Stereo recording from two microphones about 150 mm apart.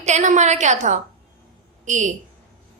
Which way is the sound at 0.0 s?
55° right (ahead or behind).